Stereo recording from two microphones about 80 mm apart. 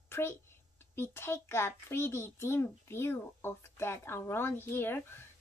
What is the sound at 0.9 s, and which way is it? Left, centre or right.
A child's voice, left.